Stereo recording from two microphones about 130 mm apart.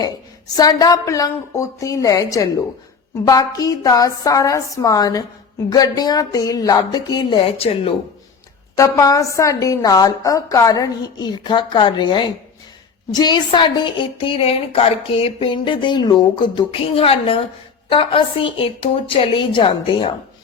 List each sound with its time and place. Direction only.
0.5 s a woman's voice: 30° left (ahead or behind); by 7.9 s 45° left (ahead or behind)
8.7 s a woman's voice: 25° left (ahead or behind); by 20.1 s 45° left (ahead or behind)